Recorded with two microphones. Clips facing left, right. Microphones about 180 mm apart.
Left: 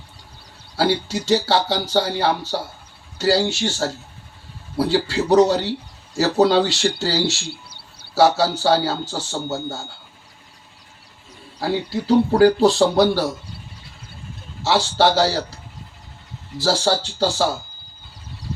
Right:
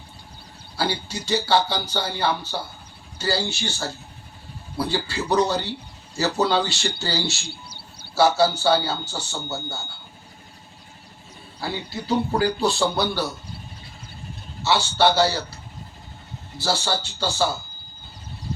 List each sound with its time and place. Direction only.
0.8 s speech: 90° left
11.6 s speech: 90° left
14.6 s speech: 90° left
16.6 s speech: 90° left